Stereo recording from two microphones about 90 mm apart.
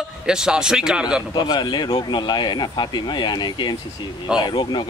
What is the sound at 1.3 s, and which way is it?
Speech, 55° left (ahead or behind).